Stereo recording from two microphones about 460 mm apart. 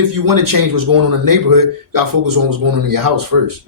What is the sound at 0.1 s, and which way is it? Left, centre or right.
A man's voice, right.